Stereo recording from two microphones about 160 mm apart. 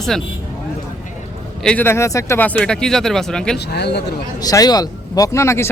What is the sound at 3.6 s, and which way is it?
Speech, 90° left.